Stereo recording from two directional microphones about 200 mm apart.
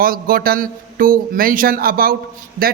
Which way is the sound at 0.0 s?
45° right (ahead or behind).